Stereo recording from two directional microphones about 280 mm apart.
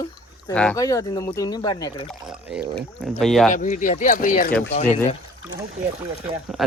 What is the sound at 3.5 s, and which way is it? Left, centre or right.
Speech, left.